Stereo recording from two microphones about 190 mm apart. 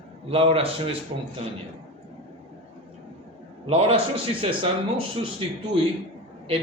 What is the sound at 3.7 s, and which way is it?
A man's voice, 30° right (ahead or behind).